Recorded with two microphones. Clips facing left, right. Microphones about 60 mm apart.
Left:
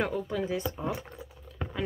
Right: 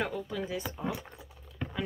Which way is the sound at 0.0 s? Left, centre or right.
Centre.